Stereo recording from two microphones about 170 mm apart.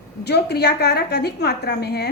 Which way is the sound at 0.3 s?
75° left (ahead or behind).